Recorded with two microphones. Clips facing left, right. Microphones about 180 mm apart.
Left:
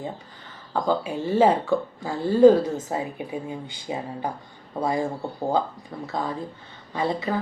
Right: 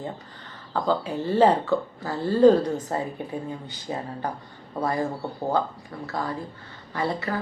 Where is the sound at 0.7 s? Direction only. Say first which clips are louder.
Left 1 dB; 15° left (ahead or behind).